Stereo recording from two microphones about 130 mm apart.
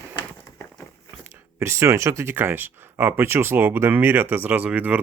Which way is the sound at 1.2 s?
15° right (ahead or behind).